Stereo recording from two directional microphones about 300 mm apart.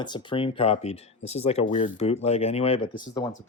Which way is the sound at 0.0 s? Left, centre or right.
Centre.